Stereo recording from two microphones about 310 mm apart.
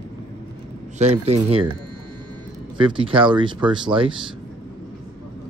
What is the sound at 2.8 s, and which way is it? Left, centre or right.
Speech, centre.